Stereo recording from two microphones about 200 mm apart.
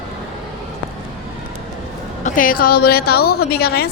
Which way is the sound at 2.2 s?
45° left (ahead or behind).